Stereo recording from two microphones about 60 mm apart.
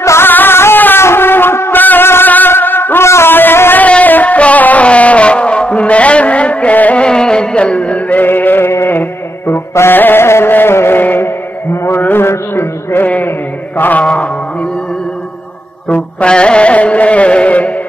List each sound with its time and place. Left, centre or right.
0.2 s music: left
3.8 s a sound: left
7.1 s music: centre; by 11.0 s left
11.0 s mantra: left
13.7 s mantra: left
14.0 s mantra: left
15.9 s music: centre